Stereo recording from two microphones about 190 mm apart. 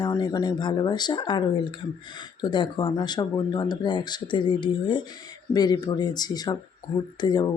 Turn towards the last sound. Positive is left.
turn(degrees=25)  # may be behind; listen again after turning